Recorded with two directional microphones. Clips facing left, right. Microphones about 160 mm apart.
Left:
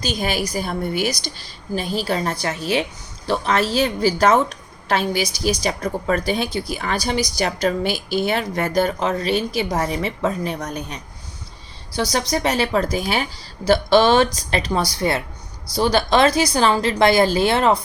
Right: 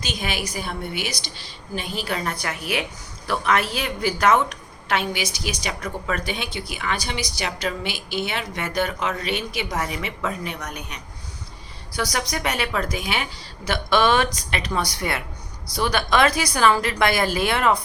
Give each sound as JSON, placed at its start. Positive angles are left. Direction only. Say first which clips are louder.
{"t": 0.0, "sound": "a woman's voice", "louder": "left 6 dB", "side_deg": 35}